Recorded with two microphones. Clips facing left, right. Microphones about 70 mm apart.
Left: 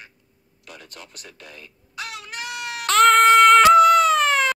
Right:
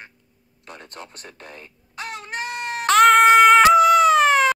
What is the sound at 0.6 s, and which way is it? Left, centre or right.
Baby cry, right.